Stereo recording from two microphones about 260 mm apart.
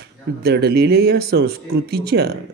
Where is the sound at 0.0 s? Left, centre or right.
Right.